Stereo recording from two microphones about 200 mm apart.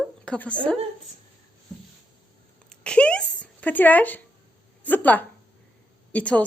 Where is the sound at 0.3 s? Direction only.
5° left (ahead or behind).